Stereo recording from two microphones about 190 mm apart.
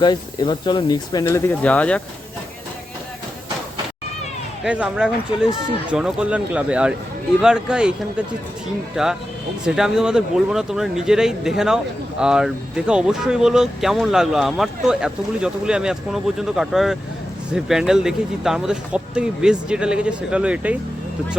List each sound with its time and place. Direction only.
0.0 s speech: 25° left (ahead or behind); by 2.0 s 5° left (ahead or behind)
4.6 s speech: 5° right (ahead or behind)
9.0 s speech: 5° right (ahead or behind)